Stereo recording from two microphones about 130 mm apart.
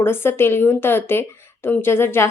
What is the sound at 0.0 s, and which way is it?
Speech, 20° left (ahead or behind).